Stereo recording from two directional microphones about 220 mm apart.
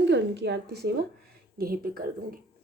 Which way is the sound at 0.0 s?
50° right (ahead or behind).